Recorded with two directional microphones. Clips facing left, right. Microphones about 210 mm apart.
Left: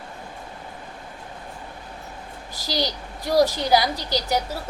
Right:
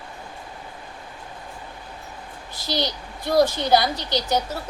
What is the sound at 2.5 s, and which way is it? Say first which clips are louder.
Speech: even; 35° left (ahead or behind).